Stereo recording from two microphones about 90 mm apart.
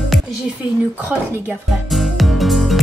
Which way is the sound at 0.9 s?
15° right (ahead or behind).